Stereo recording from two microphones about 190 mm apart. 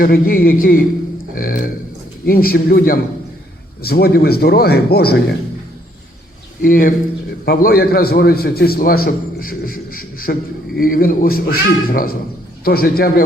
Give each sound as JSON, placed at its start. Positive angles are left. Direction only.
{"t": 0.0, "sound": "a man's voice", "side_deg": 50}
{"t": 6.6, "sound": "a man's voice", "side_deg": 45}